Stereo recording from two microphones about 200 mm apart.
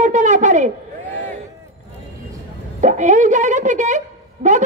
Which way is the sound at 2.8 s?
40° right (ahead or behind).